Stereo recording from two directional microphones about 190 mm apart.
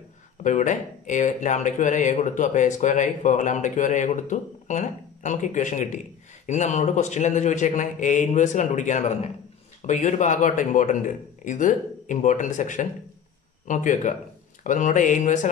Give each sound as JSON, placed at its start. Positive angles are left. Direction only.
{"t": 0.4, "sound": "speech", "side_deg": 40}